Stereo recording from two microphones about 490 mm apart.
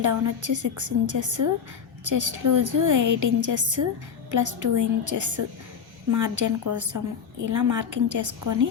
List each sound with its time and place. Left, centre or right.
0.0 s a woman's voice: right